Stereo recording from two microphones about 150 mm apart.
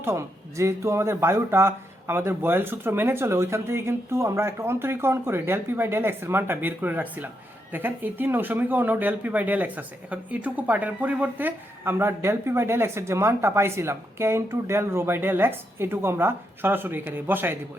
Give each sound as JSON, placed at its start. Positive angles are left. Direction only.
{"t": 0.0, "sound": "speech", "side_deg": -20}